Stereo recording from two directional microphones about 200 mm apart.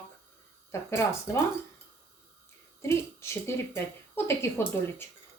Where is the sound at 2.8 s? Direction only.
15° left (ahead or behind).